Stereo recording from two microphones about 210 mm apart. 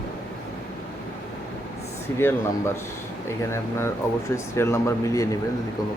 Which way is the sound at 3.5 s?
10° left (ahead or behind).